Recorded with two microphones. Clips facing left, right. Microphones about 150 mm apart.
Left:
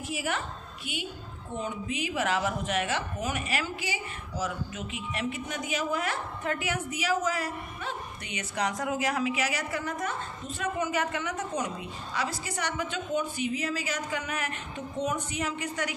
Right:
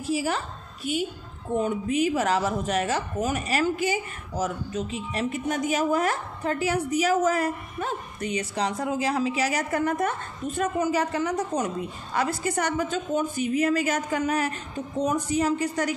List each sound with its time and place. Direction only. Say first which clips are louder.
0.0 s speech: right 6 dB; 35° right (ahead or behind); by 10.7 s 55° right (ahead or behind)
10.8 s a woman's voice: right 4 dB; 35° right (ahead or behind)